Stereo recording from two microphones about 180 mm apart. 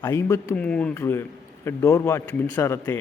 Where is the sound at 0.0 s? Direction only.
15° left (ahead or behind).